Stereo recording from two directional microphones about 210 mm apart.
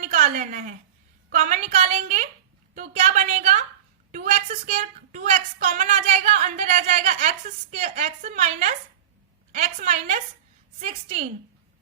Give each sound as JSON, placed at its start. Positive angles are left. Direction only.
{"t": 0.1, "sound": "a woman's voice", "side_deg": -35}